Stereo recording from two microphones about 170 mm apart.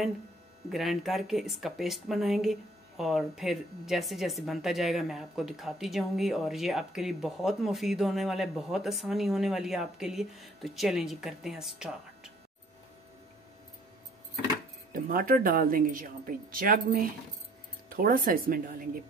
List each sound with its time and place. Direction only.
0.7 s speech: centre (ahead or behind)
14.9 s a woman's voice: 55° right (ahead or behind)